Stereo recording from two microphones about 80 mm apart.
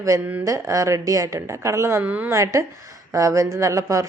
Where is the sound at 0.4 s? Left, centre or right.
Right.